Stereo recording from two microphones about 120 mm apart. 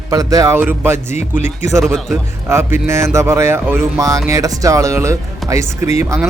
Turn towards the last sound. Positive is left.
turn(degrees=-25)  # may be behind; listen again after turning